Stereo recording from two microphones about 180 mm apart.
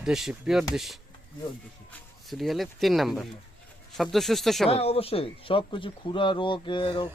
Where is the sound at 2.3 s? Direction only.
Centre (ahead or behind).